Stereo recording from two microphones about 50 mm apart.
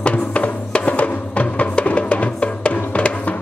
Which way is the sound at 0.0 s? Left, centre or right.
Left.